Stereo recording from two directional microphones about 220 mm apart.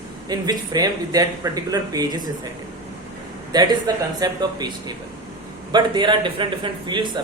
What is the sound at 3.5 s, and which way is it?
A man's voice, 20° right (ahead or behind).